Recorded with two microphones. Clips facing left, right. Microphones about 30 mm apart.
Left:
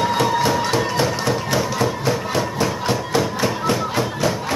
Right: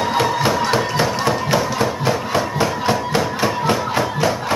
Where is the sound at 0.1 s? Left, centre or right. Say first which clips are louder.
Right 1 dB; centre.